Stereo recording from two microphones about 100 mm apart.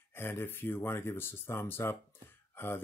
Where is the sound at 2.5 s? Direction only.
25° left (ahead or behind).